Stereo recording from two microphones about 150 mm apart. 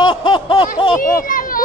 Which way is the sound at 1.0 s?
70° left (ahead or behind).